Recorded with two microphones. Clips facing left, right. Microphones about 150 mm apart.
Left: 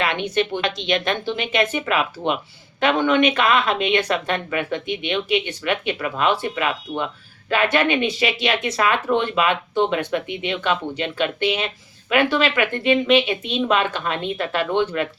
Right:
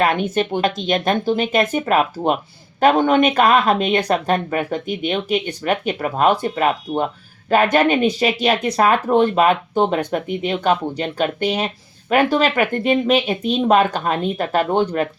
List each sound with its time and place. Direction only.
0.0 s speech: 45° right (ahead or behind)